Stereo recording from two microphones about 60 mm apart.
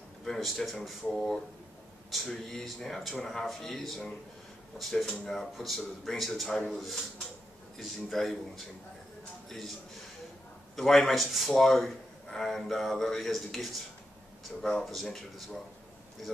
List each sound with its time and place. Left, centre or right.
0.2 s a man's voice: centre
6.5 s a man's voice: centre
10.8 s a man's voice: centre